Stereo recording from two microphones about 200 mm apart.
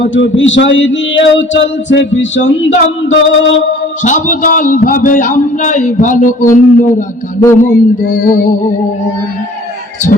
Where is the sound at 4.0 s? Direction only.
40° left (ahead or behind).